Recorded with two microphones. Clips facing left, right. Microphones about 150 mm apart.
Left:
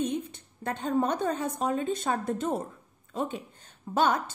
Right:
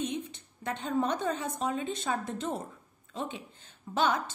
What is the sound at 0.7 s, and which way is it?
A woman's voice, 50° left (ahead or behind).